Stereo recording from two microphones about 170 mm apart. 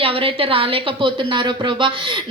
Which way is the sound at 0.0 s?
30° right (ahead or behind).